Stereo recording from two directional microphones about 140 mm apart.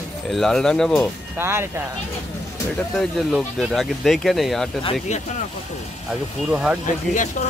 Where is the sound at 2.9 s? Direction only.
Centre (ahead or behind).